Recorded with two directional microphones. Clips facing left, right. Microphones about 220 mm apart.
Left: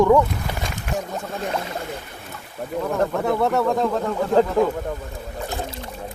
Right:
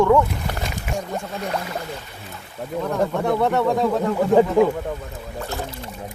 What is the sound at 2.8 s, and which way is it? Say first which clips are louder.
Speech: even; centre (ahead or behind).